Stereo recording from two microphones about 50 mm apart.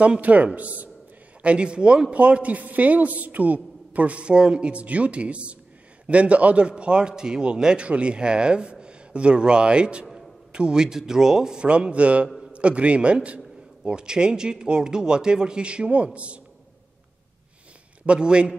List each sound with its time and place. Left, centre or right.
0.0 s a man's voice: right
18.0 s a man's voice: centre